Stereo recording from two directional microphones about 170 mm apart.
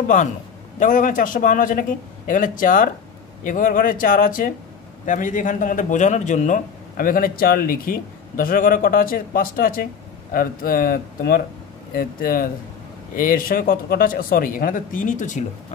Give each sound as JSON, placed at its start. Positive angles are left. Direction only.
{"t": 0.7, "sound": "a man's voice", "side_deg": 50}